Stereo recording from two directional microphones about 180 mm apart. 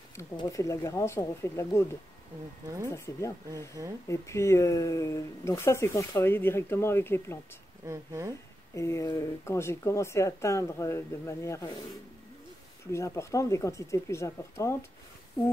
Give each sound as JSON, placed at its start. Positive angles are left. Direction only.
{"t": 0.1, "sound": "speech", "side_deg": 15}
{"t": 2.9, "sound": "speech", "side_deg": 15}
{"t": 3.5, "sound": "speech", "side_deg": -20}
{"t": 4.1, "sound": "speech", "side_deg": 15}
{"t": 7.8, "sound": "speech", "side_deg": -15}
{"t": 8.7, "sound": "speech", "side_deg": 15}
{"t": 12.9, "sound": "speech", "side_deg": 15}